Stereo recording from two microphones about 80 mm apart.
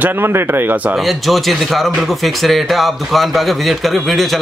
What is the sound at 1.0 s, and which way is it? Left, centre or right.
Speech, centre.